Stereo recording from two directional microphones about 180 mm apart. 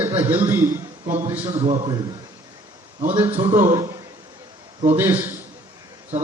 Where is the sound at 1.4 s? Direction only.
35° right (ahead or behind).